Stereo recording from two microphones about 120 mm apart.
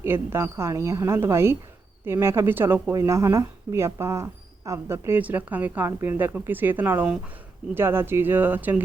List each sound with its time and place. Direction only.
0.0 s speech: 20° right (ahead or behind)